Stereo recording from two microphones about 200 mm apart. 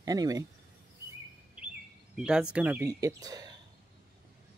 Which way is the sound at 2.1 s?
5° right (ahead or behind).